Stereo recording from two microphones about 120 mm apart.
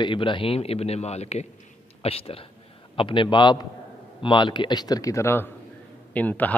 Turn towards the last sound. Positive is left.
turn(degrees=15)  # may be behind; listen again after turning